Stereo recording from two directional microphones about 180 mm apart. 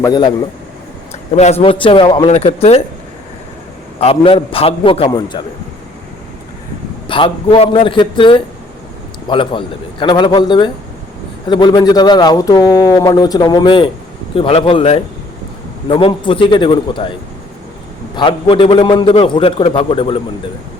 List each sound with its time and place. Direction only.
0.0 s a man's voice: 25° left (ahead or behind)
1.4 s speech: 35° left (ahead or behind)
4.0 s speech: 30° left (ahead or behind)
7.1 s a man's voice: 30° left (ahead or behind)
18.2 s a man's voice: 30° left (ahead or behind)